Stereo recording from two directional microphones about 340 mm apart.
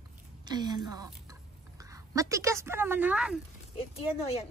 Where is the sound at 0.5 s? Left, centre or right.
Centre.